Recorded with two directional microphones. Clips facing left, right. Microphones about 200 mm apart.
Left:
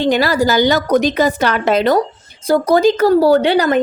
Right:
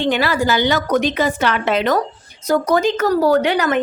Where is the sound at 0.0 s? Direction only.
40° left (ahead or behind).